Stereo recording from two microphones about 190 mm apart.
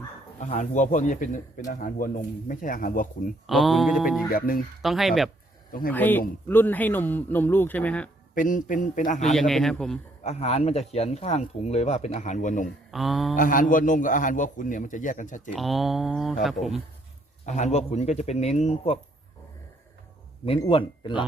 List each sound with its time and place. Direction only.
0.3 s speech: 40° left (ahead or behind)
3.4 s speech: centre (ahead or behind)
4.3 s speech: 50° left (ahead or behind)
4.8 s speech: centre (ahead or behind)
5.9 s speech: 10° left (ahead or behind)
8.4 s speech: 45° left (ahead or behind)
9.3 s speech: centre (ahead or behind)
10.2 s speech: 35° left (ahead or behind)
12.9 s speech: centre (ahead or behind)
13.3 s speech: 45° left (ahead or behind)
15.5 s speech: centre (ahead or behind)
17.4 s speech: 40° left (ahead or behind)
20.6 s speech: 25° left (ahead or behind)